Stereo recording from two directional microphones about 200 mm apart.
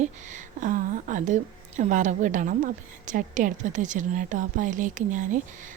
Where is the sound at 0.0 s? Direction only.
40° right (ahead or behind).